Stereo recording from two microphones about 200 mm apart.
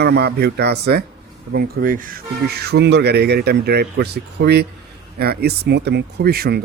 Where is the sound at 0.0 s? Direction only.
55° right (ahead or behind).